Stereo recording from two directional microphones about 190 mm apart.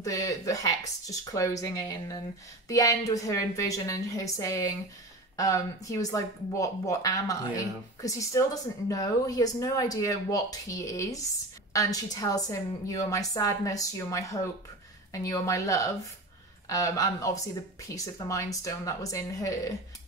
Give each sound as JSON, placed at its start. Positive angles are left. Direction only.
{"t": 0.0, "sound": "speech", "side_deg": 15}